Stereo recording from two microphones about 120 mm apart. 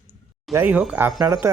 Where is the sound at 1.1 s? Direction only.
25° right (ahead or behind).